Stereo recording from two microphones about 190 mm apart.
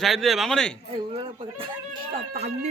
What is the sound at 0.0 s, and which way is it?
Speech, centre (ahead or behind).